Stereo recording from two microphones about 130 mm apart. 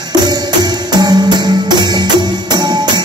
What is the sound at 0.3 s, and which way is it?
Music, 30° right (ahead or behind).